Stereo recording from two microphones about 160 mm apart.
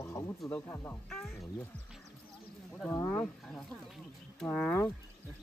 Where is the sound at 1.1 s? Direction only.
Centre (ahead or behind).